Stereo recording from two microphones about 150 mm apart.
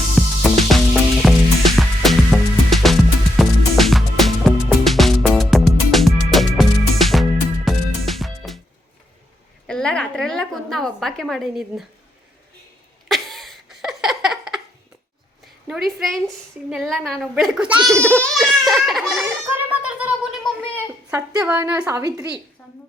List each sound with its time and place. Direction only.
0.2 s music: centre (ahead or behind)
9.6 s a sound: 5° left (ahead or behind)
13.1 s a sound: centre (ahead or behind)
15.6 s a woman's voice: centre (ahead or behind)
17.9 s baby laughter: 15° right (ahead or behind)
18.2 s a woman's voice: centre (ahead or behind)
21.1 s a woman's voice: 20° right (ahead or behind)